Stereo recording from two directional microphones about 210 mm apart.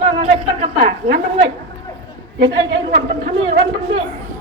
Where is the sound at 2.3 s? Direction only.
55° right (ahead or behind).